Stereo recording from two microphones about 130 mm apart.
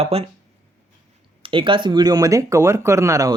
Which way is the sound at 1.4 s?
40° right (ahead or behind).